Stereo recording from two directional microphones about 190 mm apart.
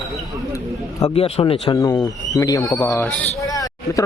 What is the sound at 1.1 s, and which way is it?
Speech, 30° left (ahead or behind).